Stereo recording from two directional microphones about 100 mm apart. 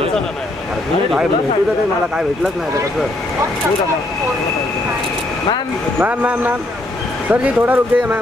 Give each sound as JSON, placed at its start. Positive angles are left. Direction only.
{"t": 5.9, "sound": "speech", "side_deg": -15}